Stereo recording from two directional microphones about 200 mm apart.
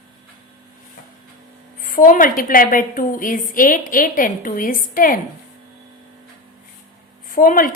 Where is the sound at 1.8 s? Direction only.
40° left (ahead or behind).